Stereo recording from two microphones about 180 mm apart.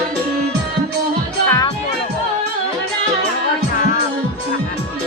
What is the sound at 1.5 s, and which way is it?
Music, 20° left (ahead or behind).